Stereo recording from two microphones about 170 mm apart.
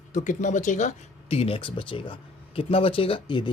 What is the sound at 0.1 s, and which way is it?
Speech, 45° left (ahead or behind).